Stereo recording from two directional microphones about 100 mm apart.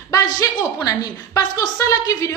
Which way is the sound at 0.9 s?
35° left (ahead or behind).